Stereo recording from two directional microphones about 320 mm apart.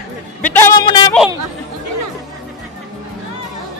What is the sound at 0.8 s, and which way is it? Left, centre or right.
Speech, centre.